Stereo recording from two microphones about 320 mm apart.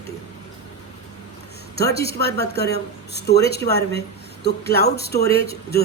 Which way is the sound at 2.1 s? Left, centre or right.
Left.